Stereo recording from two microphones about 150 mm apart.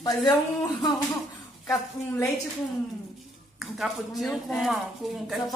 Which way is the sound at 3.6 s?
Centre (ahead or behind).